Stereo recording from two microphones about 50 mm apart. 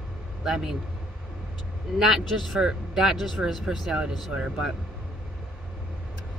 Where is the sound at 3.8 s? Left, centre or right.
Centre.